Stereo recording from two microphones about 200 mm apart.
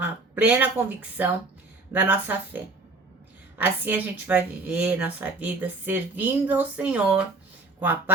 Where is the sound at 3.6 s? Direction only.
10° right (ahead or behind).